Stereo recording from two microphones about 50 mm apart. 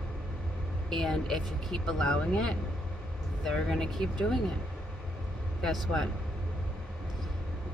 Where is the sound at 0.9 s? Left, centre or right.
Centre.